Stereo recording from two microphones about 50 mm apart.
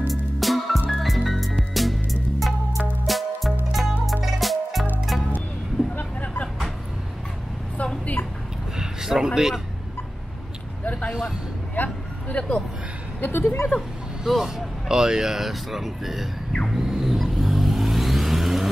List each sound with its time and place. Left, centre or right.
0.1 s music: centre
5.9 s vehicle: left
8.7 s a sound: centre
11.1 s vehicle: centre
11.7 s vehicle: left
13.2 s speech: left
13.7 s speech: centre
16.7 s vehicle: centre